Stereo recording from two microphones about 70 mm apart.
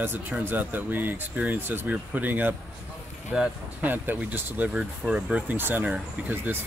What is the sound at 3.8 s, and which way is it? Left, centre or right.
Speech, right.